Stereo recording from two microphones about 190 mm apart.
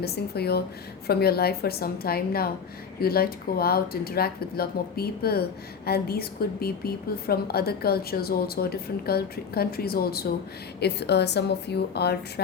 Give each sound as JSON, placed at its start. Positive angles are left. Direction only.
{"t": 0.0, "sound": "speech", "side_deg": 55}